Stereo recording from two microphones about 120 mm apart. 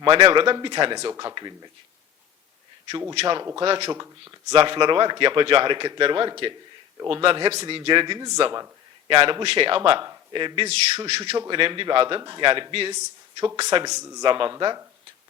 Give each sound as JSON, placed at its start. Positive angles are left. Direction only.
{"t": 0.0, "sound": "a man's voice", "side_deg": -40}
{"t": 3.2, "sound": "a man's voice", "side_deg": -40}
{"t": 14.2, "sound": "a man's voice", "side_deg": -40}